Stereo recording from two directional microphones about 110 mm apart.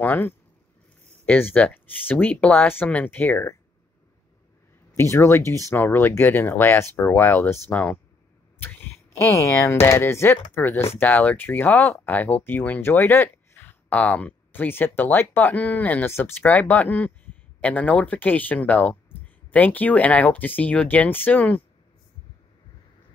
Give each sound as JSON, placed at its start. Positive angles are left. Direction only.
{"t": 0.0, "sound": "speech", "side_deg": 15}
{"t": 5.1, "sound": "speech", "side_deg": 25}
{"t": 7.7, "sound": "speech", "side_deg": 10}
{"t": 8.5, "sound": "a sound", "side_deg": 20}
{"t": 9.2, "sound": "speech", "side_deg": 30}